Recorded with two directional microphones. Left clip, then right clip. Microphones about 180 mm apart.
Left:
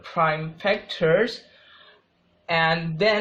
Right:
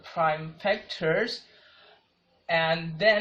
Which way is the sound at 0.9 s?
45° left (ahead or behind).